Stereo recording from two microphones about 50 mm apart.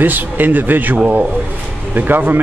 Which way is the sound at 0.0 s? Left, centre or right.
Right.